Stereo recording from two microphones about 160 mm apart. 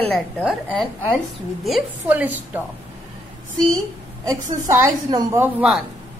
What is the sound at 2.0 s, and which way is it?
Speech, 10° right (ahead or behind).